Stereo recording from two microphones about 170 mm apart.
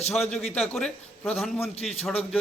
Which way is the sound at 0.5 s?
5° left (ahead or behind).